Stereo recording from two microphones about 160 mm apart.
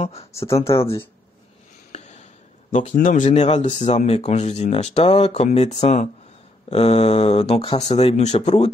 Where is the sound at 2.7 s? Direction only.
55° left (ahead or behind).